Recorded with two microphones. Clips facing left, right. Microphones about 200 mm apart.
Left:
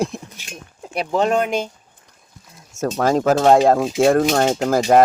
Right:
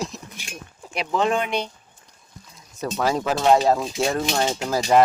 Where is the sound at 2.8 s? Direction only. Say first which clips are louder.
Left 5 dB; 45° left (ahead or behind).